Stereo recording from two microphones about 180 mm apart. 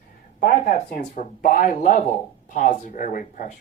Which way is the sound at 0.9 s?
45° left (ahead or behind).